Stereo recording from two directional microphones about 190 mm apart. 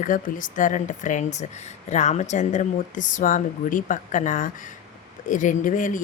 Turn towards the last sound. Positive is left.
turn(degrees=45)  # may be behind; listen again after turning